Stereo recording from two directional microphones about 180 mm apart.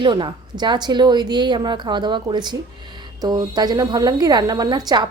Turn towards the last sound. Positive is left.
turn(degrees=-25)  # may be behind; listen again after turning